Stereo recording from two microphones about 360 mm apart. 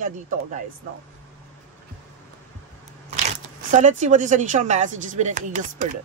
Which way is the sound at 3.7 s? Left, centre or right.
Centre.